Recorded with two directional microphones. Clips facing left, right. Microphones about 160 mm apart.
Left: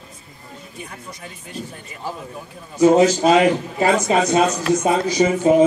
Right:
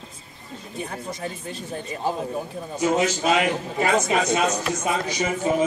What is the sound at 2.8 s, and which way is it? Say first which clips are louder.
A man's voice: left 9 dB; 35° left (ahead or behind).